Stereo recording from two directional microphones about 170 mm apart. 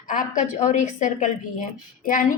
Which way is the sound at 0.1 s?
50° left (ahead or behind).